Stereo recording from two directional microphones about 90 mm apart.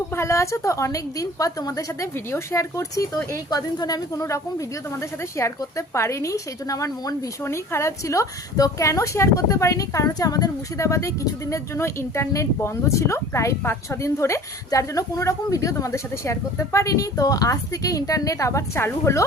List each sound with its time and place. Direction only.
0.1 s a woman's voice: 30° left (ahead or behind)
2.1 s a woman's voice: 30° left (ahead or behind)
7.4 s a woman's voice: 30° left (ahead or behind)